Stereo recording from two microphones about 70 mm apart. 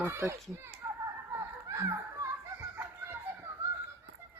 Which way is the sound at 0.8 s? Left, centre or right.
Right.